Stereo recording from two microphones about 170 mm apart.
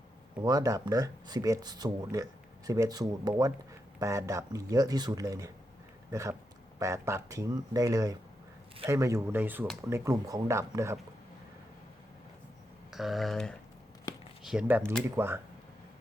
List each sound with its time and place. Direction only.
0.4 s speech: 20° right (ahead or behind)
12.9 s speech: centre (ahead or behind)
14.1 s a sound: 20° left (ahead or behind)
14.4 s speech: 5° right (ahead or behind)